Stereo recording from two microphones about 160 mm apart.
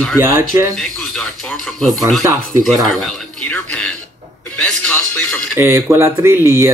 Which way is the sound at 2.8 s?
5° left (ahead or behind).